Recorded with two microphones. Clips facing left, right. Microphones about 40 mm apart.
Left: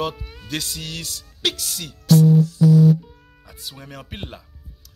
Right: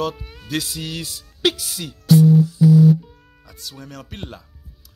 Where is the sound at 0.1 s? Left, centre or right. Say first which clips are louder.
Right 3 dB; centre.